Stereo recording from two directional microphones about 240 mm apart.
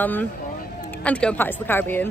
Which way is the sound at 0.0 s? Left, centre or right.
Centre.